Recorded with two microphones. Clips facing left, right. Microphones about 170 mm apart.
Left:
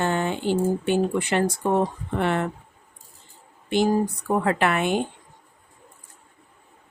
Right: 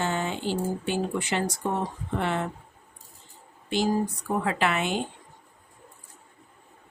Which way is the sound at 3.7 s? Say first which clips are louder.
Left 4 dB; 55° left (ahead or behind).